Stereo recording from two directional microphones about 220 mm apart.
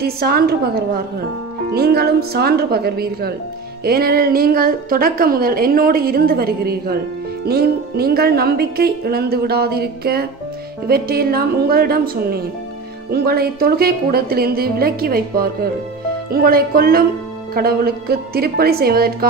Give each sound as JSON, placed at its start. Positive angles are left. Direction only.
{"t": 0.0, "sound": "a woman's voice", "side_deg": -45}